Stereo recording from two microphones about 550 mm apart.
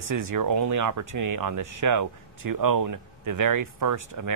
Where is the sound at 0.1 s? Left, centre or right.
Right.